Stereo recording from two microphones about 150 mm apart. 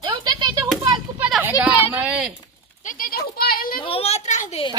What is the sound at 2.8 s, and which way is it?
Speech, 65° left (ahead or behind).